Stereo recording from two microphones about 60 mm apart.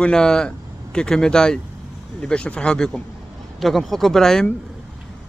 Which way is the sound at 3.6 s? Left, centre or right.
Centre.